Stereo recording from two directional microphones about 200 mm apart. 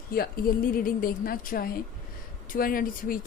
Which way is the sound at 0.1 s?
45° left (ahead or behind).